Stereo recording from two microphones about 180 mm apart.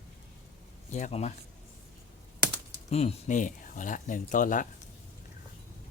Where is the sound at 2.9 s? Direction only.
35° left (ahead or behind).